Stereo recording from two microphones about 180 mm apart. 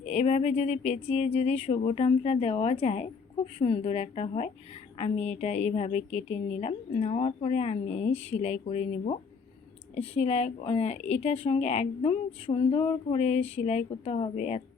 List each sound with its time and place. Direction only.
0.0 s a woman's voice: 40° left (ahead or behind)